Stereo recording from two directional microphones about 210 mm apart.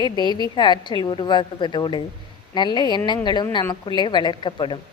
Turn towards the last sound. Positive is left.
turn(degrees=25)  # may be behind; listen again after turning